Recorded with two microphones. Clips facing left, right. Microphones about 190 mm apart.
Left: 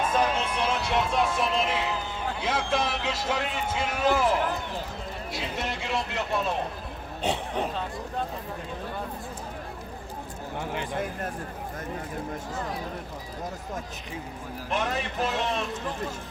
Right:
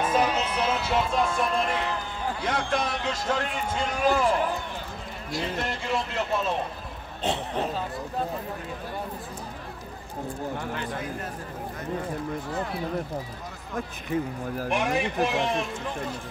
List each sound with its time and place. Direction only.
0.1 s run: 5° right (ahead or behind)
2.4 s a man's voice: 5° left (ahead or behind)
7.2 s speech: 10° left (ahead or behind)
10.6 s speech: 15° left (ahead or behind)
14.7 s a man's voice: 15° right (ahead or behind)